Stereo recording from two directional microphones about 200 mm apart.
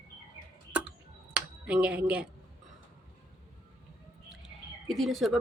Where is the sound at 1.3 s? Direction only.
5° right (ahead or behind).